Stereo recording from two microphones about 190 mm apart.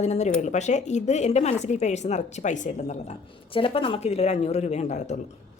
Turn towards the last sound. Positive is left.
turn(degrees=40)  # may be behind; listen again after turning